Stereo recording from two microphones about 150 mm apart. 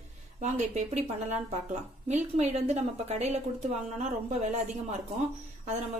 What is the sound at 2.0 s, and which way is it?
A woman's voice, 50° right (ahead or behind).